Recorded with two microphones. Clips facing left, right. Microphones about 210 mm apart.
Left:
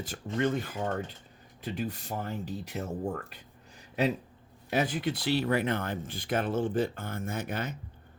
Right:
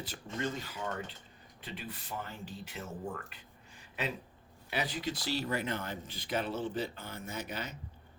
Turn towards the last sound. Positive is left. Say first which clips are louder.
# left 6 dB
turn(degrees=50)  # may be behind; listen again after turning